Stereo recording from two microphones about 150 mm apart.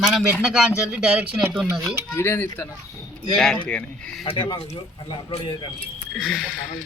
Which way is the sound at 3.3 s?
5° left (ahead or behind).